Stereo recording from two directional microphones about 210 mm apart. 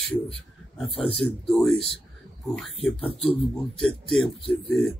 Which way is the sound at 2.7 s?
25° left (ahead or behind).